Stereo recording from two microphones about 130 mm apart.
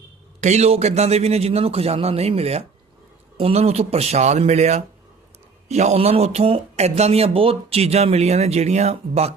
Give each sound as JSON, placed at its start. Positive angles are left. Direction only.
{"t": 0.4, "sound": "a man's voice", "side_deg": -55}